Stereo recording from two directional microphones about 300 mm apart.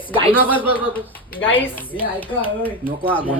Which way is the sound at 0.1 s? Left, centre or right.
Centre.